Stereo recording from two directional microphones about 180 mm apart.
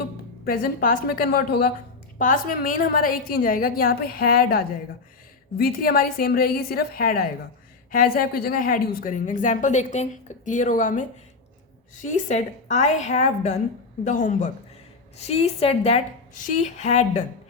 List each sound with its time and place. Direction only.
0.4 s a woman's voice: 50° left (ahead or behind)
12.0 s a woman's voice: 40° left (ahead or behind)